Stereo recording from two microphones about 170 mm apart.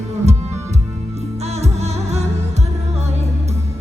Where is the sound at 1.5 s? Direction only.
40° right (ahead or behind).